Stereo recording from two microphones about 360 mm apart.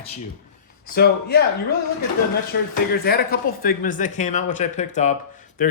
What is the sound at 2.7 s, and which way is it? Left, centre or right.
Speech, left.